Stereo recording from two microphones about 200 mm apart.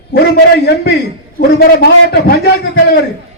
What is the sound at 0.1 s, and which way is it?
A man's voice, 55° left (ahead or behind).